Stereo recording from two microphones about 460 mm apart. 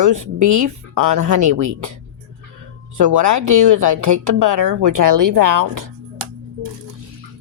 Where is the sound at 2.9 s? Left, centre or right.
Right.